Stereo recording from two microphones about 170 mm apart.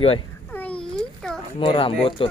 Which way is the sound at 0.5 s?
10° left (ahead or behind).